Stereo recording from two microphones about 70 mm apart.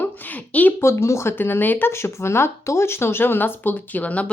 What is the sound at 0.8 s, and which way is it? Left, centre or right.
Speech, left.